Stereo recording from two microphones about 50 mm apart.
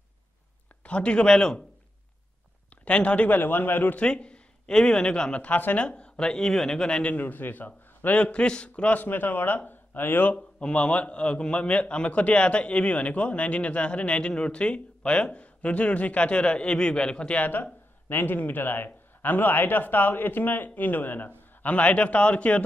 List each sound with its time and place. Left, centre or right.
0.8 s speech: left
2.8 s speech: left
3.3 s a man's voice: left
4.0 s speech: left
5.4 s a man's voice: left
5.8 s speech: left
7.1 s a man's voice: left
10.3 s speech: left
17.4 s a man's voice: left
21.6 s speech: left